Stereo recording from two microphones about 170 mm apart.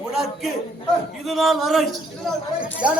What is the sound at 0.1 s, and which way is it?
A man's voice, centre (ahead or behind).